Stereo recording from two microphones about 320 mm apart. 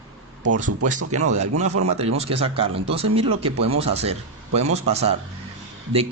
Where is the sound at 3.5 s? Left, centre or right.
Right.